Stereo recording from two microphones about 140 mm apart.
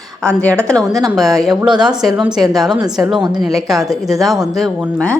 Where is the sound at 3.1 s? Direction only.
30° right (ahead or behind).